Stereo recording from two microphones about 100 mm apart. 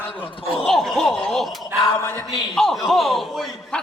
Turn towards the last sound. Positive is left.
turn(degrees=0)  # may be behind; listen again after turning